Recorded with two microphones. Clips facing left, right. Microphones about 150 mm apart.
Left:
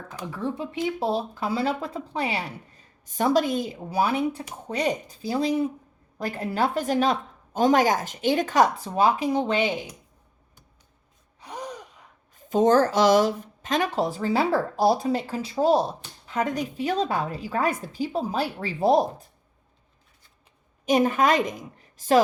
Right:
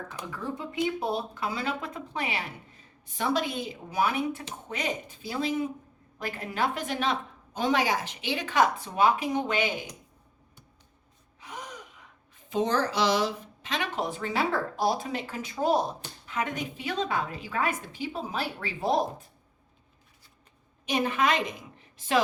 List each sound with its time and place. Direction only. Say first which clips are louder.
0.1 s speech: left 9 dB; 30° left (ahead or behind)
11.3 s gasp: left 6 dB; 35° left (ahead or behind)
12.5 s speech: left 8 dB; 45° left (ahead or behind)
20.8 s a woman's voice: left 6 dB; 45° left (ahead or behind)